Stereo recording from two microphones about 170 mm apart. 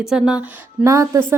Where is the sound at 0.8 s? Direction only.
15° right (ahead or behind).